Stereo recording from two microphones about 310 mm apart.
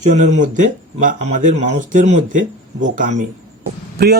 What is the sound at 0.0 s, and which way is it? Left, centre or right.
Speech, right.